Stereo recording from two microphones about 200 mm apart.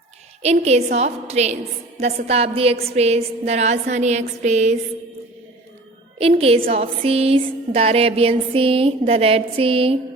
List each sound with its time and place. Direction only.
0.4 s a woman's voice: 30° right (ahead or behind)
6.4 s music: 30° right (ahead or behind)